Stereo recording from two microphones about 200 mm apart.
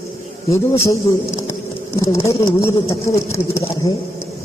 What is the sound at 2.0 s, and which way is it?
Speech, 15° left (ahead or behind).